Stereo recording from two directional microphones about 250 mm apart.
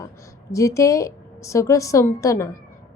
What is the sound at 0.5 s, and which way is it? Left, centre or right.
A woman's voice, centre.